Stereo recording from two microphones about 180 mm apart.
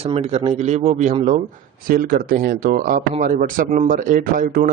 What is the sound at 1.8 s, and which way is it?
Speech, 50° right (ahead or behind).